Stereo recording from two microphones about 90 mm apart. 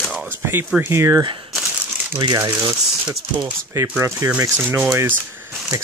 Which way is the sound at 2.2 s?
45° right (ahead or behind).